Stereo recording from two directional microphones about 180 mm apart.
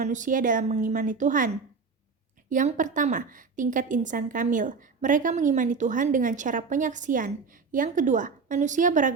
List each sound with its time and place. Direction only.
0.0 s a woman's voice: 45° right (ahead or behind)
2.5 s a woman's voice: 45° right (ahead or behind)